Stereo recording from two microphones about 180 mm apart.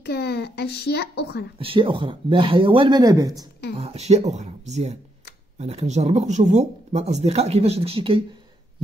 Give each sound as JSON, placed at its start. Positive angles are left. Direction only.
{"t": 0.0, "sound": "a child's voice", "side_deg": 65}
{"t": 1.6, "sound": "speech", "side_deg": -30}
{"t": 3.7, "sound": "speech", "side_deg": -35}